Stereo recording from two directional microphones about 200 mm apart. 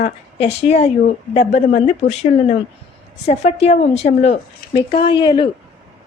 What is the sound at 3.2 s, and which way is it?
Speech, 30° left (ahead or behind).